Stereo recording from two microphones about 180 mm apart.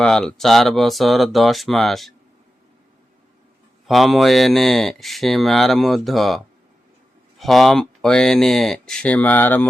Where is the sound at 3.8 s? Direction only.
Centre (ahead or behind).